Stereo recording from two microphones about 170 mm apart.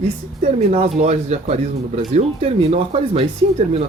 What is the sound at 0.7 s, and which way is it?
Speech, 40° right (ahead or behind).